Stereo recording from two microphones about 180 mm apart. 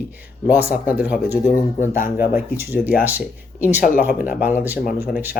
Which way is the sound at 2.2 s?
10° right (ahead or behind).